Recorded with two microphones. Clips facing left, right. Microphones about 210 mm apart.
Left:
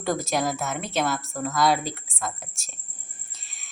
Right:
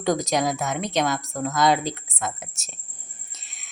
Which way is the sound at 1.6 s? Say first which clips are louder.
Right 2 dB; centre (ahead or behind).